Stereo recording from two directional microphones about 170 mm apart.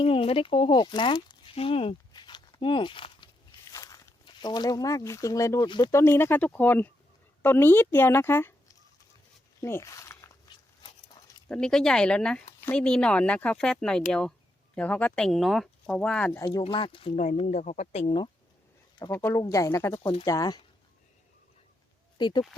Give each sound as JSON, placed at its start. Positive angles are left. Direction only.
{"t": 0.0, "sound": "a woman's voice", "side_deg": 35}
{"t": 10.8, "sound": "pig", "side_deg": 25}
{"t": 11.4, "sound": "speech", "side_deg": 5}
{"t": 16.6, "sound": "speech", "side_deg": 30}
{"t": 19.1, "sound": "a woman's voice", "side_deg": 15}
{"t": 22.2, "sound": "speech", "side_deg": 25}